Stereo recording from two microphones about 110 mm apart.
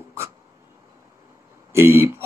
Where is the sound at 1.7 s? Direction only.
20° right (ahead or behind).